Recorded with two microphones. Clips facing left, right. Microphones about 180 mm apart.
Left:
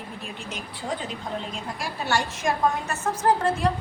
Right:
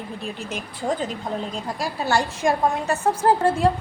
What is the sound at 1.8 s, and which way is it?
Speech, 35° right (ahead or behind).